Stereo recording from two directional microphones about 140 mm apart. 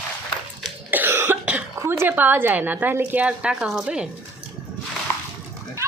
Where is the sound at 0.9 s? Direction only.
15° right (ahead or behind).